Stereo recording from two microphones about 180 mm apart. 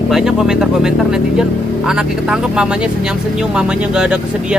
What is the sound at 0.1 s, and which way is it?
Speech, 5° right (ahead or behind).